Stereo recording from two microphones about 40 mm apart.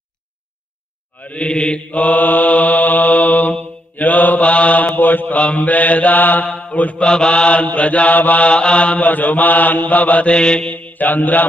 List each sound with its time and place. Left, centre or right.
1.2 s mantra: left
1.9 s mantra: left
4.4 s mantra: left
5.4 s mantra: left
7.1 s mantra: left
8.5 s mantra: left
10.3 s mantra: left
10.7 s mantra: left